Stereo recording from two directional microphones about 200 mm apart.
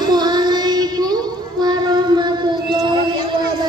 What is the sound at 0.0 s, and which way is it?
Child singing, 20° right (ahead or behind).